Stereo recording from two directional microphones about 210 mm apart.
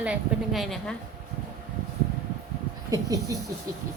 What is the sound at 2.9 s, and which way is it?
Speech, 15° right (ahead or behind).